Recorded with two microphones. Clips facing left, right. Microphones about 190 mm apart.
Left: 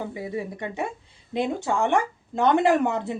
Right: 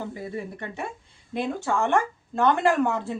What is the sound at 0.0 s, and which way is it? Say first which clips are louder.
Speech: left 2 dB; 15° left (ahead or behind).